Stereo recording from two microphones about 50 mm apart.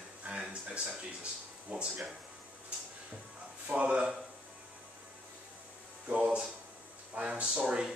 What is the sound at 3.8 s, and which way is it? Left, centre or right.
Speech, right.